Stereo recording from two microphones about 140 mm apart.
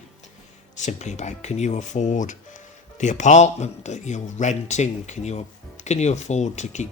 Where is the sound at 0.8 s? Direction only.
55° left (ahead or behind).